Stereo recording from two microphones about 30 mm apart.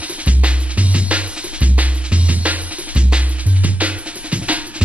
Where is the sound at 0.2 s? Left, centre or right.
Right.